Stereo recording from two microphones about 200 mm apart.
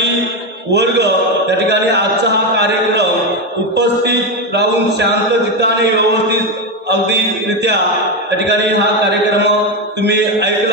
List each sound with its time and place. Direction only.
0.7 s mantra: 55° right (ahead or behind)
1.7 s a sound: 60° right (ahead or behind)
6.9 s mantra: 60° right (ahead or behind)